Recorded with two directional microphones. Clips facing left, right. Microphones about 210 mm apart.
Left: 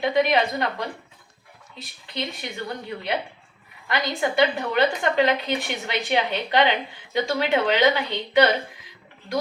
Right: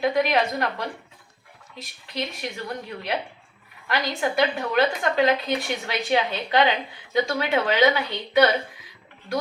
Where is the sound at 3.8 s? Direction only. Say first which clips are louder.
Left 1 dB; 20° left (ahead or behind).